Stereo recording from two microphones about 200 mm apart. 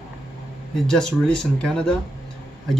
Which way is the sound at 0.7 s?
Centre (ahead or behind).